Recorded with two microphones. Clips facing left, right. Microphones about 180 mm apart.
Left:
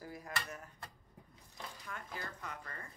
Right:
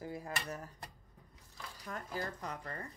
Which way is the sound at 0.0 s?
25° right (ahead or behind).